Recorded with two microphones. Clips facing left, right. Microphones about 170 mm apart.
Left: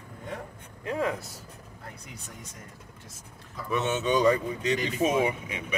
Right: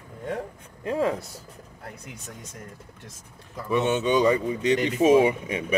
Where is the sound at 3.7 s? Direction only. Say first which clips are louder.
Right 5 dB; 15° right (ahead or behind).